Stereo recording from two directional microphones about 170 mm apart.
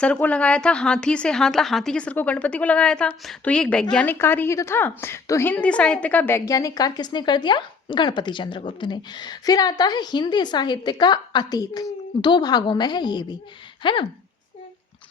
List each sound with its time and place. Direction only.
0.0 s a woman's voice: 5° left (ahead or behind); by 14.1 s 30° left (ahead or behind)